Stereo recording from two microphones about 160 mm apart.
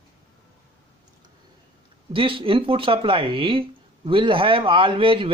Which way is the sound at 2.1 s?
35° right (ahead or behind).